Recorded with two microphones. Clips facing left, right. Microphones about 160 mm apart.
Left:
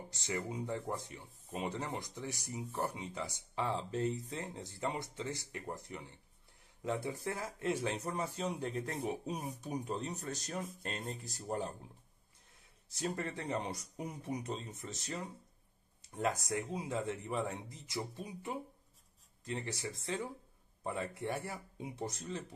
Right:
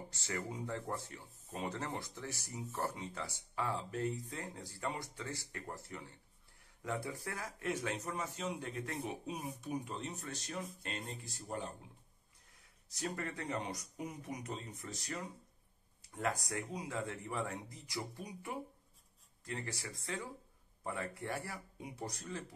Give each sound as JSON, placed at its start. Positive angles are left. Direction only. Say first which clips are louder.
{"t": 0.1, "sound": "speech", "louder": "left 3 dB", "side_deg": 20}
{"t": 12.9, "sound": "speech", "louder": "left 2 dB", "side_deg": 30}